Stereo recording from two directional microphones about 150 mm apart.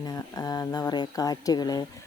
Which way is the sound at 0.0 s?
25° left (ahead or behind).